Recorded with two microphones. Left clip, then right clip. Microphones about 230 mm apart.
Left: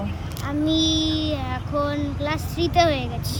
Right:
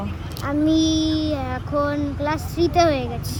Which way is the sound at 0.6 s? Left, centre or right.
Centre.